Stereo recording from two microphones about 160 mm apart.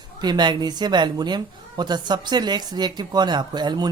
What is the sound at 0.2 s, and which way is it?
A woman's voice, 25° right (ahead or behind).